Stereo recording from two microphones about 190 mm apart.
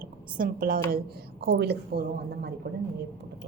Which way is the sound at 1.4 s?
60° right (ahead or behind).